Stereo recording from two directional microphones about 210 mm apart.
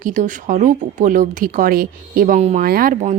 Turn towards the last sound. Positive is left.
turn(degrees=-40)  # may be behind; listen again after turning